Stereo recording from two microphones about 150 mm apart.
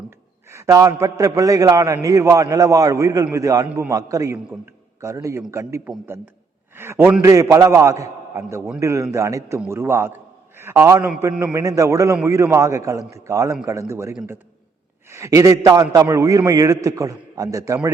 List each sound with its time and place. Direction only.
0.5 s a man's voice: 20° right (ahead or behind)
15.1 s a man's voice: 20° right (ahead or behind)